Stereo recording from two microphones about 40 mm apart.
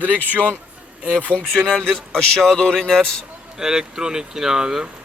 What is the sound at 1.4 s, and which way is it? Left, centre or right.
Speech, centre.